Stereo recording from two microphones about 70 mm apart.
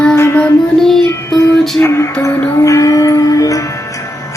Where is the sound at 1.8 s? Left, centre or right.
Left.